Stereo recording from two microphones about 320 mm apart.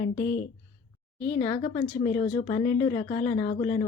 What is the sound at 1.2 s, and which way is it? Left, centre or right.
Speech, centre.